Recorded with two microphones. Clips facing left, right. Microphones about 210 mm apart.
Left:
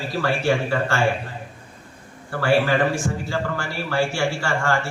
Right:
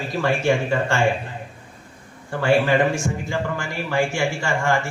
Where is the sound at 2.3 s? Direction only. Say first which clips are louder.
Right 1 dB; 20° right (ahead or behind).